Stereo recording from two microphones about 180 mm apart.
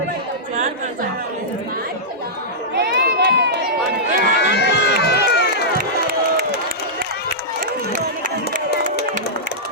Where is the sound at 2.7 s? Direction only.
60° right (ahead or behind).